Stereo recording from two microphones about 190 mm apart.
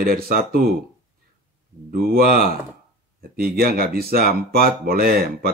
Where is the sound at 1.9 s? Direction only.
50° right (ahead or behind).